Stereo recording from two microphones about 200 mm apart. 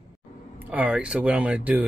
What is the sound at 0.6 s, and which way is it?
Speech, 5° right (ahead or behind).